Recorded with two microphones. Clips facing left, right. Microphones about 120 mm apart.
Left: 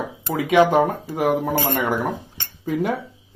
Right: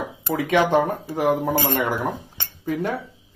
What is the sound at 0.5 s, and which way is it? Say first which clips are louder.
Speech: left 4 dB; 10° left (ahead or behind).